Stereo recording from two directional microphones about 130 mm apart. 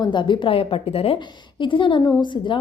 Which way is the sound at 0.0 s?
35° left (ahead or behind).